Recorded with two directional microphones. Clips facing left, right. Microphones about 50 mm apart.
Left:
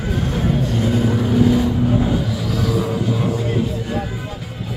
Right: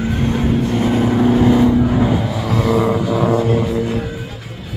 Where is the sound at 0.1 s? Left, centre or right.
Right.